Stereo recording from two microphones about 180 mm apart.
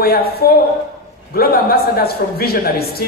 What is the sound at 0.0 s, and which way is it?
A man's voice, 60° left (ahead or behind).